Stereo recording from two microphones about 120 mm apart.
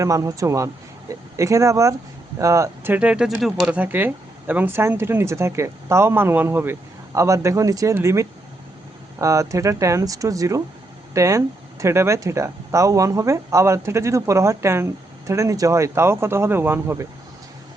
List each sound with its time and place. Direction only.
0.0 s speech: 30° right (ahead or behind)
2.9 s speech: 10° right (ahead or behind)
3.8 s speech: 15° right (ahead or behind)